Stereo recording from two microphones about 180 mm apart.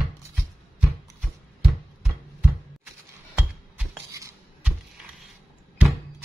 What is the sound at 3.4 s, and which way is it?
Music, 5° right (ahead or behind).